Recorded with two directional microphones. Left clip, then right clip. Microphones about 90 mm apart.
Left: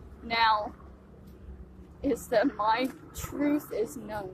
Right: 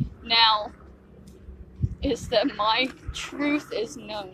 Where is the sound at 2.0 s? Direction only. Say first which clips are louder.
Right 2 dB; 25° left (ahead or behind).